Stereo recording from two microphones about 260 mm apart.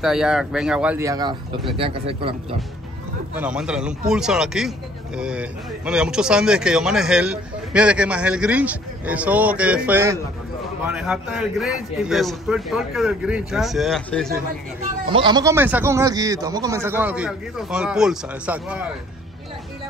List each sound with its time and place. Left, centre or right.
0.0 s a man's voice: centre; by 2.3 s right
3.3 s a man's voice: centre
15.0 s speech: centre